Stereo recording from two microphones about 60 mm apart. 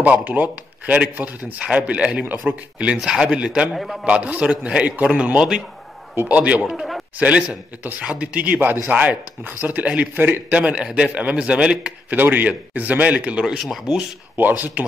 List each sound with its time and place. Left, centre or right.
0.0 s a man's voice: right
3.0 s a man's voice: centre
3.7 s speech: centre
4.0 s a man's voice: right
6.7 s a man's voice: centre
7.2 s a man's voice: right
12.2 s a man's voice: right
13.6 s speech: centre
14.3 s a man's voice: right